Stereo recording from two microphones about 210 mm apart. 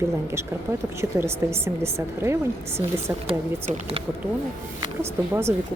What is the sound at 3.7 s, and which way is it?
Speech, 30° right (ahead or behind).